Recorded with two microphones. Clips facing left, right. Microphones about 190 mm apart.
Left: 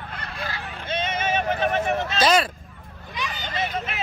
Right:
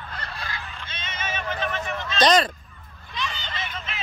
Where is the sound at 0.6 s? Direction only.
60° left (ahead or behind).